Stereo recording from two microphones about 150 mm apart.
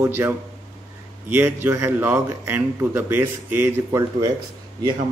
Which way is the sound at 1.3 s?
15° right (ahead or behind).